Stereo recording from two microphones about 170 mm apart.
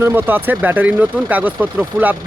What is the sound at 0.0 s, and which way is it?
Speech, 10° right (ahead or behind).